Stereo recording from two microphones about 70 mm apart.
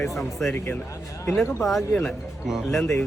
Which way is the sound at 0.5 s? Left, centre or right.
Left.